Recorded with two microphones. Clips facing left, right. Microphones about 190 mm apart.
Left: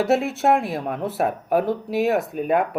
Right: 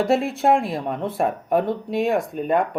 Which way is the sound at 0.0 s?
Centre (ahead or behind).